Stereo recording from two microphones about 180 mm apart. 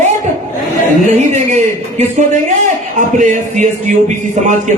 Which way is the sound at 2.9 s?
45° right (ahead or behind).